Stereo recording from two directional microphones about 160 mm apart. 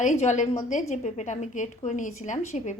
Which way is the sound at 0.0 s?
50° left (ahead or behind).